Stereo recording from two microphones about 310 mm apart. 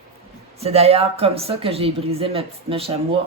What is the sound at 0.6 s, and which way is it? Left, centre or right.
Speech, centre.